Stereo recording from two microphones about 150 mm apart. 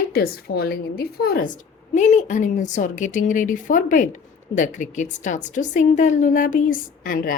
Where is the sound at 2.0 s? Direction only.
50° left (ahead or behind).